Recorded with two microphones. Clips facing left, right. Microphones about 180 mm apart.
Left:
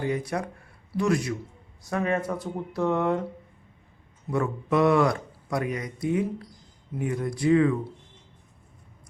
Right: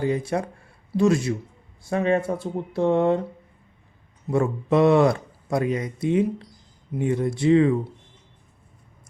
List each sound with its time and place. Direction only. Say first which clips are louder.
0.0 s speech: right 4 dB; 25° right (ahead or behind)
4.3 s speech: right 4 dB; 30° right (ahead or behind)